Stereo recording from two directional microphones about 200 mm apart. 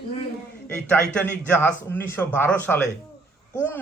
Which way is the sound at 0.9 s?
10° left (ahead or behind).